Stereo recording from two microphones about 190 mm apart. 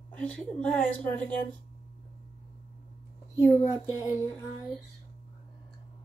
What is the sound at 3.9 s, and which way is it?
Speech, 15° left (ahead or behind).